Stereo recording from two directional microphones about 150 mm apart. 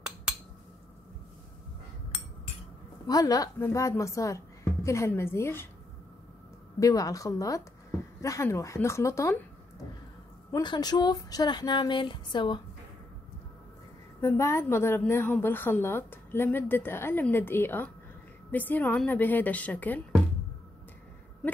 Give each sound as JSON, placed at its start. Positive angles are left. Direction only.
{"t": 3.1, "sound": "a woman's voice", "side_deg": 25}
{"t": 6.8, "sound": "speech", "side_deg": 25}
{"t": 10.5, "sound": "speech", "side_deg": 30}
{"t": 14.2, "sound": "a woman's voice", "side_deg": 20}